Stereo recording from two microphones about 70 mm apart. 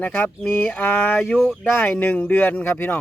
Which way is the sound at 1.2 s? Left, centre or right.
Centre.